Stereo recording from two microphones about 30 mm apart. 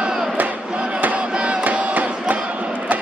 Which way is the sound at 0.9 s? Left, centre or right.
Right.